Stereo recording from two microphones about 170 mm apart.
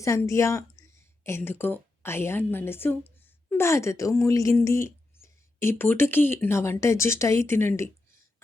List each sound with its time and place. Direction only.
0.0 s a woman's voice: 20° left (ahead or behind)